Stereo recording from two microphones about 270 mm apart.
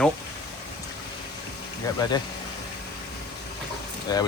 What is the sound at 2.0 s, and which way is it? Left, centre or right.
Speech, centre.